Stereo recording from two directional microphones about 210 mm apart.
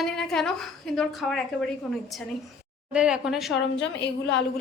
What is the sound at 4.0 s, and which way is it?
Speech, 55° left (ahead or behind).